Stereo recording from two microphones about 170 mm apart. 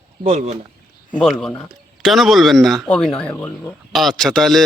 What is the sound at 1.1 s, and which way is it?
Speech, 5° left (ahead or behind).